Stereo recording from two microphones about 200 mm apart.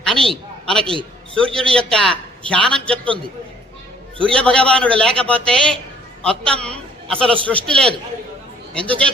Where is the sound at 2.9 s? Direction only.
25° right (ahead or behind).